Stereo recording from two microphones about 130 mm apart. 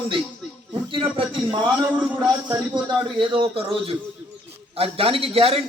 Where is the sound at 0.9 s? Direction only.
40° right (ahead or behind).